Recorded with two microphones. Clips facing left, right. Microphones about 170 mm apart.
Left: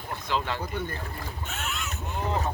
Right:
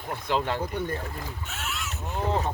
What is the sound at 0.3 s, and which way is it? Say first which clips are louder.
Speech: right 3 dB; 50° right (ahead or behind).